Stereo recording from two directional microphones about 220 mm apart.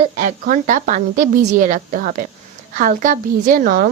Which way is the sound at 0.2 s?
35° right (ahead or behind).